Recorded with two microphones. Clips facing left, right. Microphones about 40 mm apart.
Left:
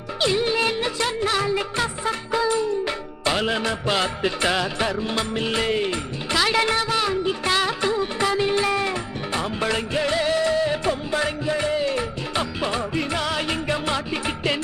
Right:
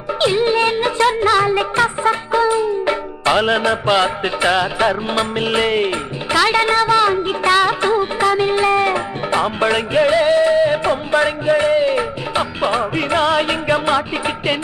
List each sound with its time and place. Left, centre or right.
0.2 s music: centre
1.2 s speech: centre
1.8 s music: centre
6.3 s speech: centre
7.1 s music: centre